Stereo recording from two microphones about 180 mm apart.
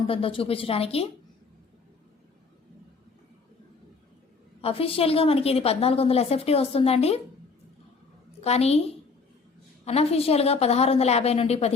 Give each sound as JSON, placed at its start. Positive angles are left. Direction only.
{"t": 0.1, "sound": "a woman's voice", "side_deg": 30}
{"t": 4.6, "sound": "a woman's voice", "side_deg": 30}
{"t": 8.4, "sound": "a woman's voice", "side_deg": 35}
{"t": 9.8, "sound": "a woman's voice", "side_deg": 35}